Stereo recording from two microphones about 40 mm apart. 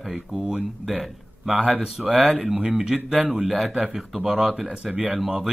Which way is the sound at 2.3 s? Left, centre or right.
Centre.